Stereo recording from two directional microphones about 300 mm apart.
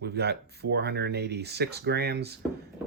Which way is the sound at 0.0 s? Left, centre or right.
Right.